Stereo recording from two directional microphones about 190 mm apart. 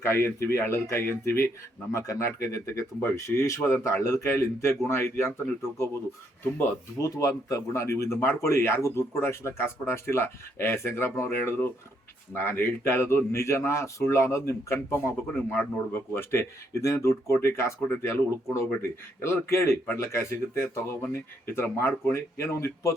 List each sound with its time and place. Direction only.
0.0 s speech: 15° left (ahead or behind)